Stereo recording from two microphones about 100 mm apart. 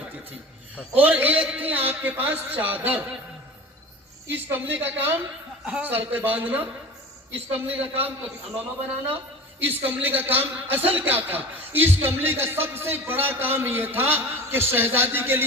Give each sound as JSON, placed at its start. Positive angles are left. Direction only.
{"t": 0.9, "sound": "a man's voice", "side_deg": -15}
{"t": 4.3, "sound": "a man's voice", "side_deg": -15}